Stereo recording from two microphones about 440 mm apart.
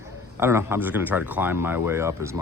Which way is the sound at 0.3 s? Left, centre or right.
Centre.